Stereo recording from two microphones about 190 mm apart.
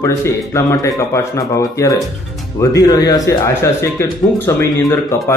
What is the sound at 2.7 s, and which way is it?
Speech, 20° left (ahead or behind).